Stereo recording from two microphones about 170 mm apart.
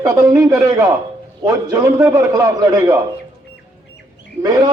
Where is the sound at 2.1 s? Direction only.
20° right (ahead or behind).